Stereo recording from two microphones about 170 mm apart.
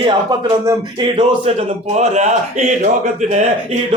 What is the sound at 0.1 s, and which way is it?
Speech, 20° right (ahead or behind).